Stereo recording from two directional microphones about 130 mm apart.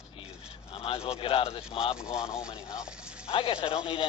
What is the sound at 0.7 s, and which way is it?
Speech, 45° left (ahead or behind).